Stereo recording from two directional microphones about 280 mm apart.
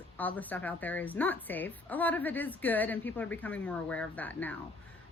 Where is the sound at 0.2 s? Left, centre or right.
Centre.